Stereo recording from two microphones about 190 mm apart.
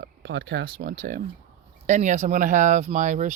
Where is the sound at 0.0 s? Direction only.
55° right (ahead or behind).